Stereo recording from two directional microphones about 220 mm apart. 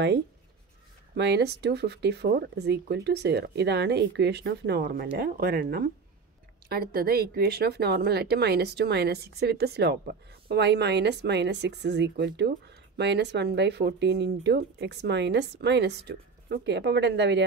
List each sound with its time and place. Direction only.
1.1 s speech: 50° right (ahead or behind)